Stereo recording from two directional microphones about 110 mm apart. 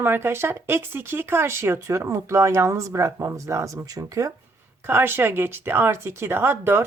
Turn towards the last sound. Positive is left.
turn(degrees=-20)  # may be behind; listen again after turning